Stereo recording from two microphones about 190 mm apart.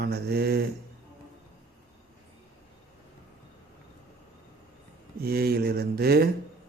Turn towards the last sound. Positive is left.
turn(degrees=-55)  # may be behind; listen again after turning